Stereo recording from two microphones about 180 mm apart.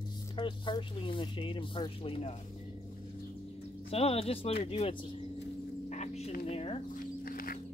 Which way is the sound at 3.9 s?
30° left (ahead or behind).